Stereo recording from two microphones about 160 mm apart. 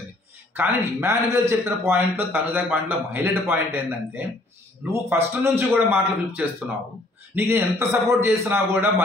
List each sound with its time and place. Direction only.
0.6 s speech: 15° right (ahead or behind)